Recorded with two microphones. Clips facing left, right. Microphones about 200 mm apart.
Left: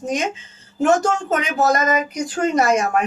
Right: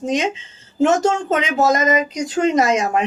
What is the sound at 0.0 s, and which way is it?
Speech, 25° right (ahead or behind).